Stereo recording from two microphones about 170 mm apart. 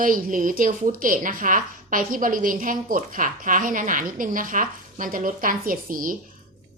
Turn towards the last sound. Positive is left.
turn(degrees=-55)  # may be behind; listen again after turning